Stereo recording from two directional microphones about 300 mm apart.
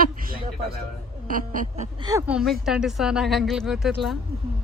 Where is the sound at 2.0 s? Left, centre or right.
Centre.